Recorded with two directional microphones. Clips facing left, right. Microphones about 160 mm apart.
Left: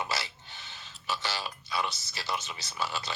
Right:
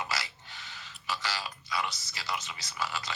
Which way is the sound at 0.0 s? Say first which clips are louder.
Left 2 dB; 25° left (ahead or behind).